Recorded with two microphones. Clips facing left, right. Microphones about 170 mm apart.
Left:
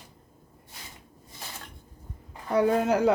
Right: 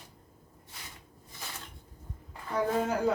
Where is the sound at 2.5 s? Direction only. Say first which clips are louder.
Left 6 dB; 80° left.